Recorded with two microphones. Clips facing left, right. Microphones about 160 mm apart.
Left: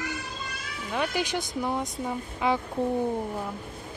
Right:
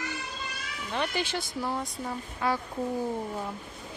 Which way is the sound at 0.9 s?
10° left (ahead or behind).